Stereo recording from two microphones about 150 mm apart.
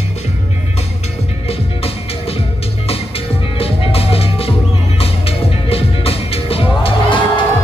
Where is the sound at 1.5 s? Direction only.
40° left (ahead or behind).